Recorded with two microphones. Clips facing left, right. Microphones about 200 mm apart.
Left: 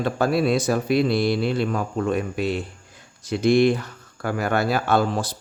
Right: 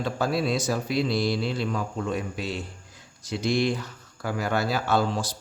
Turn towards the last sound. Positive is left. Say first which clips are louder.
# left 4 dB
turn(degrees=55)  # may be behind; listen again after turning